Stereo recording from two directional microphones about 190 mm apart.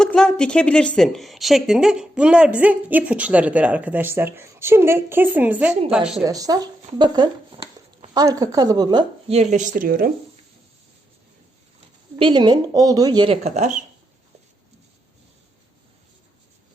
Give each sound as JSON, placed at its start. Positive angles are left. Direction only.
{"t": 0.0, "sound": "a woman's voice", "side_deg": 5}
{"t": 6.2, "sound": "speech", "side_deg": -20}
{"t": 9.3, "sound": "speech", "side_deg": -35}
{"t": 12.2, "sound": "speech", "side_deg": -25}